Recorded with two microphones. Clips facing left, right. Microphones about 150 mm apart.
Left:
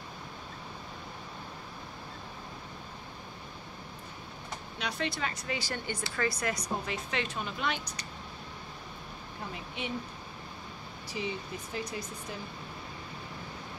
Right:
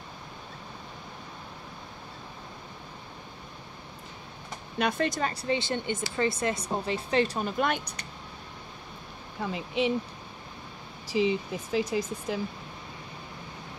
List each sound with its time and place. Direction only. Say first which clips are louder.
4.7 s speech: right 8 dB; 50° right (ahead or behind)
9.5 s speech: right 12 dB; 90° right
11.1 s speech: right 10 dB; 90° right